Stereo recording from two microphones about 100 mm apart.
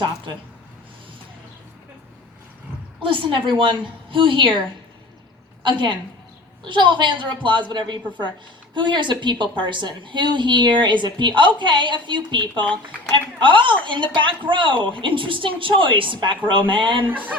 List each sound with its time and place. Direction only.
3.0 s a woman's voice: 60° right (ahead or behind)
5.6 s a woman's voice: 50° right (ahead or behind)